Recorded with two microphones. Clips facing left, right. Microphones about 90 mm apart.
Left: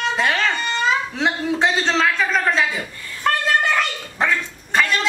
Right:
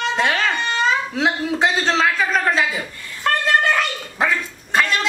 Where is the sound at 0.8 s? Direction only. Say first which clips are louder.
Right 1 dB; centre (ahead or behind).